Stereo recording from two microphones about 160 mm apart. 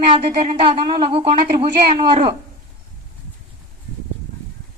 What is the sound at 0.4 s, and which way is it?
Speech, 35° right (ahead or behind).